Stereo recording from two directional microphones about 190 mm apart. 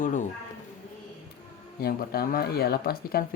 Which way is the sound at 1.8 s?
55° left (ahead or behind).